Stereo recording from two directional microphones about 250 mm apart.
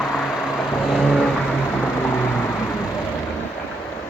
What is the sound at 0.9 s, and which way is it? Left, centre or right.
Vehicle, centre.